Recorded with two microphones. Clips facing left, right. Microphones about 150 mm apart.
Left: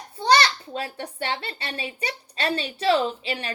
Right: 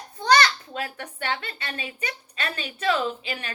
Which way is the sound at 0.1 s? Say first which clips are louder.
Even; 30° left (ahead or behind).